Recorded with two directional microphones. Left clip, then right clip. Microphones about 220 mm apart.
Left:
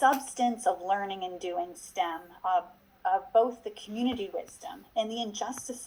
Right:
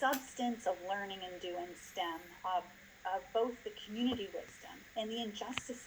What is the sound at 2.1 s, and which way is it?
Speech, 20° left (ahead or behind).